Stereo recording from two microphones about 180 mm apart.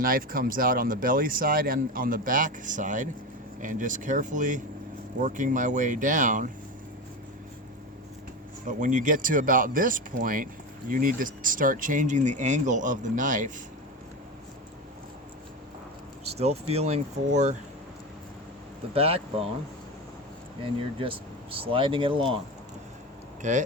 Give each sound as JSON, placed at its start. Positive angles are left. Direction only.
{"t": 0.0, "sound": "speech", "side_deg": -50}
{"t": 8.6, "sound": "speech", "side_deg": -45}
{"t": 16.3, "sound": "speech", "side_deg": -35}
{"t": 18.9, "sound": "speech", "side_deg": -35}
{"t": 20.7, "sound": "speech", "side_deg": -30}
{"t": 23.4, "sound": "speech", "side_deg": -40}